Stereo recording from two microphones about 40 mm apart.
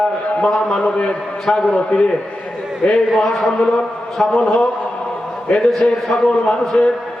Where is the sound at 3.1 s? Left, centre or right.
Centre.